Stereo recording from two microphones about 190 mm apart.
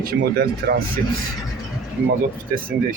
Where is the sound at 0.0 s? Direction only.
55° right (ahead or behind).